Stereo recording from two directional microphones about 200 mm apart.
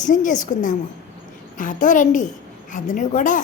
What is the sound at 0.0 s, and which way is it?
A woman's voice, 40° left (ahead or behind).